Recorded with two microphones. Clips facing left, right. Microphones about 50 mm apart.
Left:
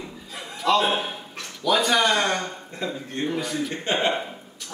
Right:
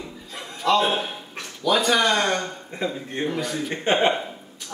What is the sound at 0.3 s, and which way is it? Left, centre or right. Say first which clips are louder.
Chuckle: right 1 dB; centre.